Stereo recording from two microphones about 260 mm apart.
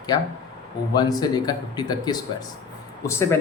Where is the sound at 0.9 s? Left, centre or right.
Centre.